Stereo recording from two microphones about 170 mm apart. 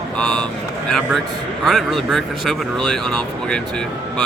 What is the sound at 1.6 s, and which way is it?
Speech, centre (ahead or behind).